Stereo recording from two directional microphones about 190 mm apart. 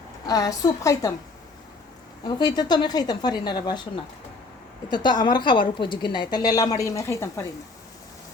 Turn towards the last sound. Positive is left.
turn(degrees=15)  # may be behind; listen again after turning